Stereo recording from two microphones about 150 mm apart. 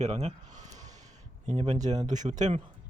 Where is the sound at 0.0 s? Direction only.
45° right (ahead or behind).